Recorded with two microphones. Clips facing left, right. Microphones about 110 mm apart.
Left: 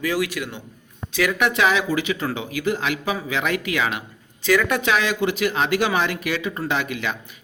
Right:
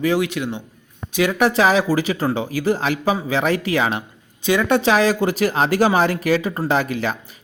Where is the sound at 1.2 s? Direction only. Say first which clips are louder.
Right 3 dB; 35° right (ahead or behind).